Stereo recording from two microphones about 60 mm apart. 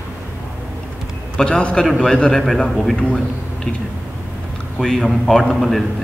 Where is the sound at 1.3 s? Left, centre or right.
Centre.